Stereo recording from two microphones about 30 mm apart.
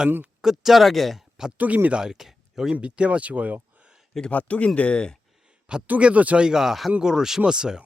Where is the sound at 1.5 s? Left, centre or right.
Right.